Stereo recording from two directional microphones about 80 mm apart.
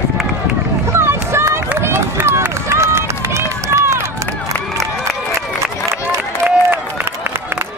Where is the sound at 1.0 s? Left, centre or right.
Right.